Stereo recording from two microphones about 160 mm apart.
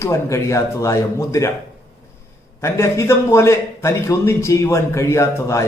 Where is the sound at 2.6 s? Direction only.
20° left (ahead or behind).